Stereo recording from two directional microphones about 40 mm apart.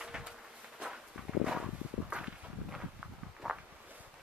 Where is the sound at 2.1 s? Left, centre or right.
Right.